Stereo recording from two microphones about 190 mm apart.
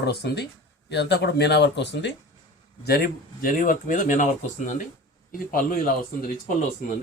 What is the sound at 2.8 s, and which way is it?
Speech, 50° left (ahead or behind).